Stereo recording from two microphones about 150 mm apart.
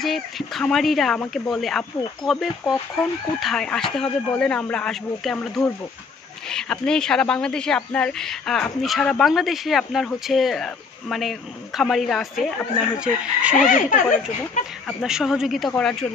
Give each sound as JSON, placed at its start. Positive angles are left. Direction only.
{"t": 0.0, "sound": "speech", "side_deg": 0}
{"t": 13.6, "sound": "speech", "side_deg": 60}
{"t": 14.9, "sound": "speech", "side_deg": 0}